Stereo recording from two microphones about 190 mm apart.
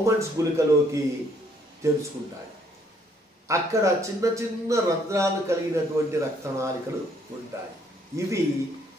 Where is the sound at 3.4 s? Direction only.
15° right (ahead or behind).